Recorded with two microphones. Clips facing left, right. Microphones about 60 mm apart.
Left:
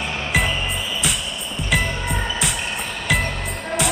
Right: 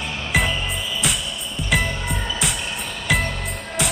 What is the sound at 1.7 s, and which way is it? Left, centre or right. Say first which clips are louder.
Music: even; centre.